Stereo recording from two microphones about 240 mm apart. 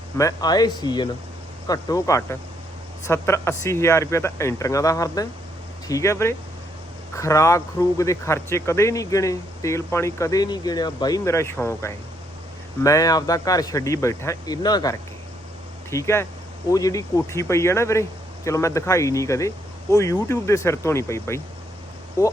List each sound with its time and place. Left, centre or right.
0.2 s speech: centre